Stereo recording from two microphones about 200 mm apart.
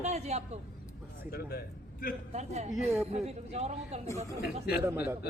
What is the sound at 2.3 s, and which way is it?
A woman's voice, 35° right (ahead or behind).